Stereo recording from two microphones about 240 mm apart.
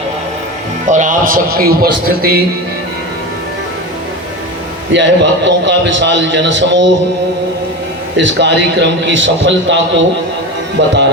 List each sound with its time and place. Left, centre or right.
0.9 s a man's voice: right
4.9 s a man's voice: right
8.1 s a man's voice: right